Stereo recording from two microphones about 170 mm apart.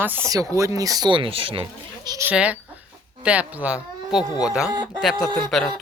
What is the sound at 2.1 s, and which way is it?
Speech, 10° right (ahead or behind).